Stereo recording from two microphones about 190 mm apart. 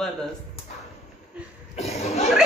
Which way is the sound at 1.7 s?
35° left (ahead or behind).